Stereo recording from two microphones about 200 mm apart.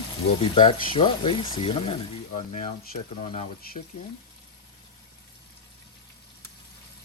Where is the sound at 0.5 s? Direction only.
25° left (ahead or behind).